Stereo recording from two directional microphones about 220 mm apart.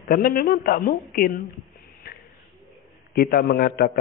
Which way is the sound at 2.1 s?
45° left (ahead or behind).